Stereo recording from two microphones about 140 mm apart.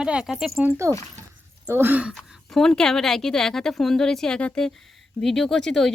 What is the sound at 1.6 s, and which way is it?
Speech, 15° right (ahead or behind).